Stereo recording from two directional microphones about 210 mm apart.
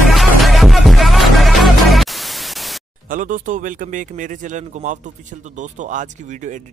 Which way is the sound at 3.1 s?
40° right (ahead or behind).